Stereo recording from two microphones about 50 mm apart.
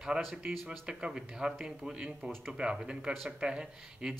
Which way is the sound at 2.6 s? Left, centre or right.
Centre.